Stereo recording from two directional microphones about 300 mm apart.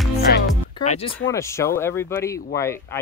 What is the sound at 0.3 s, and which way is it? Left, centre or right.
Music, left.